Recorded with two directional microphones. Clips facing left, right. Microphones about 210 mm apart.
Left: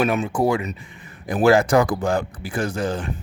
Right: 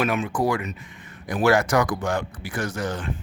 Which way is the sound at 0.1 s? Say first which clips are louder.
Left 3 dB; 25° left (ahead or behind).